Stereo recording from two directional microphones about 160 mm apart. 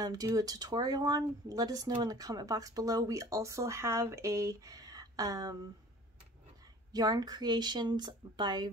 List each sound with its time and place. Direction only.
0.0 s speech: 25° right (ahead or behind)
6.9 s speech: 25° right (ahead or behind)